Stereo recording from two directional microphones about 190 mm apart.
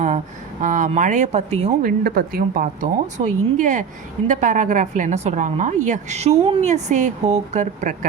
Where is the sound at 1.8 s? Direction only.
50° right (ahead or behind).